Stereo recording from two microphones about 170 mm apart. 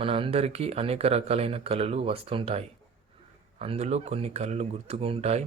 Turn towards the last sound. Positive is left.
turn(degrees=-40)  # may be behind; listen again after turning